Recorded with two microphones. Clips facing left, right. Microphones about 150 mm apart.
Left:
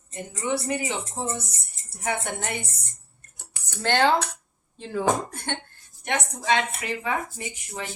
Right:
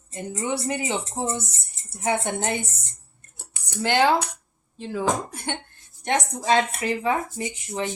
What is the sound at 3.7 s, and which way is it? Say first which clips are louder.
Speech: right 1 dB; 10° right (ahead or behind).